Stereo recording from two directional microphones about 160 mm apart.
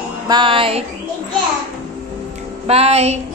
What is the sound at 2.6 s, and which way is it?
Music, 40° right (ahead or behind).